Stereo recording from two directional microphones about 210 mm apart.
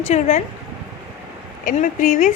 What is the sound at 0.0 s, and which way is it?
Speech, 35° left (ahead or behind).